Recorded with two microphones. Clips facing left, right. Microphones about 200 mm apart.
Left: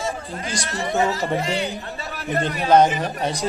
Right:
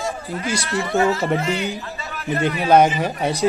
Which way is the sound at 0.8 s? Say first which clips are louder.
Right 2 dB; 15° left (ahead or behind).